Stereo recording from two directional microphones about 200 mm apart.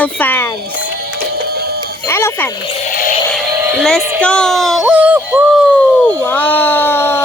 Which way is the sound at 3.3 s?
10° right (ahead or behind).